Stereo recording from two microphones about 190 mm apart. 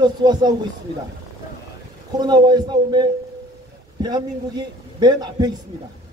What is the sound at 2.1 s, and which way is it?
A man's voice, 20° right (ahead or behind).